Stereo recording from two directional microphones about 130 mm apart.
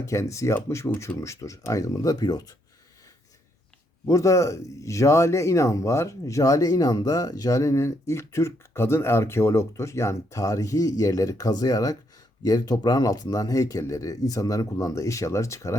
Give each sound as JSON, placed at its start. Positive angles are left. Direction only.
{"t": 0.0, "sound": "speech", "side_deg": 25}
{"t": 4.0, "sound": "speech", "side_deg": 25}